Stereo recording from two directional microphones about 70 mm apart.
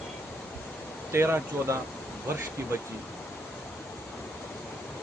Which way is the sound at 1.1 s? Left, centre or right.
Right.